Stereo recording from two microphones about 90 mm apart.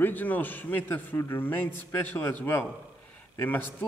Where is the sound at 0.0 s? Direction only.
20° left (ahead or behind).